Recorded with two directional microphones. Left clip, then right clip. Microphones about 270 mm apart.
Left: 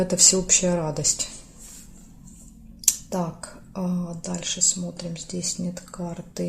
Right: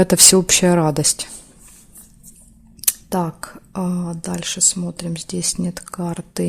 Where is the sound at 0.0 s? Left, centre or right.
Right.